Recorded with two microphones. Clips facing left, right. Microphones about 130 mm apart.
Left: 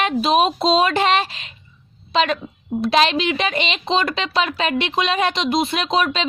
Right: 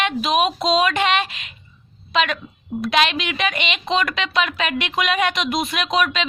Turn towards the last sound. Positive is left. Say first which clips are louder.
# left 1 dB
turn(degrees=30)  # may be behind; listen again after turning